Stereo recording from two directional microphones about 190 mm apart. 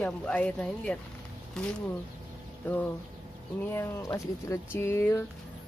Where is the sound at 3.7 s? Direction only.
15° left (ahead or behind).